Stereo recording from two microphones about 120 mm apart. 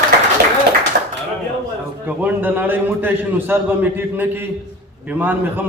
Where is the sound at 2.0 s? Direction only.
15° right (ahead or behind).